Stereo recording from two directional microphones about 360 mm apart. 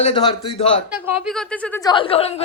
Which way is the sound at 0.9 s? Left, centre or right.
Centre.